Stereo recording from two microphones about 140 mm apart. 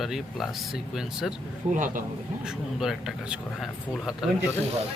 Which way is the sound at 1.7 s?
65° right (ahead or behind).